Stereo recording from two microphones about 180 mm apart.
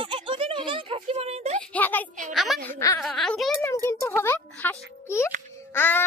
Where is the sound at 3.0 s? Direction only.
5° left (ahead or behind).